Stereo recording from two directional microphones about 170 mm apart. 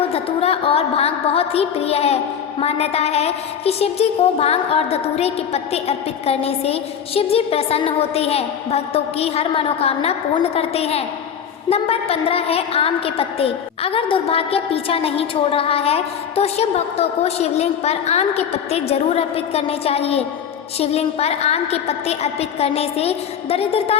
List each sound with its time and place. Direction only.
0.1 s a woman's voice: 35° left (ahead or behind)